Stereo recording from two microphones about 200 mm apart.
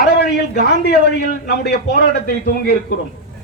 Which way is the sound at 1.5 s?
55° left (ahead or behind).